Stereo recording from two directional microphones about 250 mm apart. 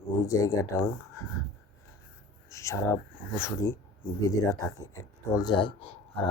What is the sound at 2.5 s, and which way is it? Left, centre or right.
Speech, centre.